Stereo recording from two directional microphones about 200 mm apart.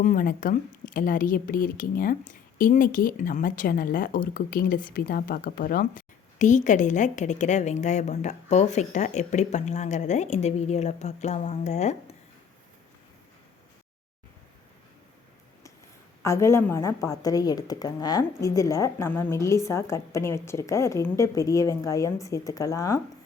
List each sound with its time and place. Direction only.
0.0 s a woman's voice: 40° left (ahead or behind)
16.2 s speech: 15° left (ahead or behind)